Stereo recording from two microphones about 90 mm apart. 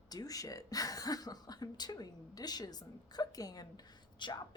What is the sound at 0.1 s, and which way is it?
Speech, 45° left (ahead or behind).